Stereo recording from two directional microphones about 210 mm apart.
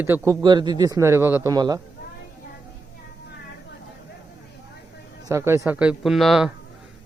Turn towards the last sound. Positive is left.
turn(degrees=0)  # may be behind; listen again after turning